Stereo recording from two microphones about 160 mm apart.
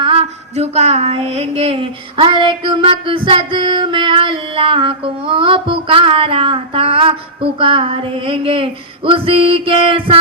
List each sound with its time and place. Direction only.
0.0 s female singing: 40° right (ahead or behind)